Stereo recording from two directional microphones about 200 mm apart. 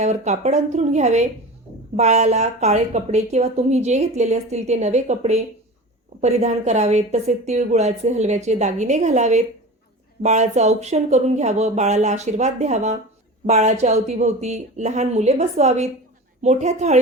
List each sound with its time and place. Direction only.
0.0 s speech: 35° right (ahead or behind)